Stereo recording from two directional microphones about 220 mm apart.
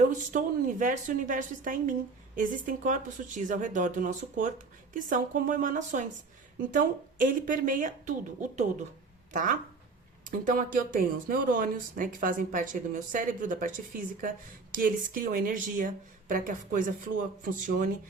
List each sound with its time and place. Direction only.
0.3 s a woman's voice: 35° right (ahead or behind)